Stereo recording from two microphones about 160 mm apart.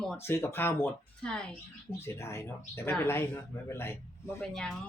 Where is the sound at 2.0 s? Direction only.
15° left (ahead or behind).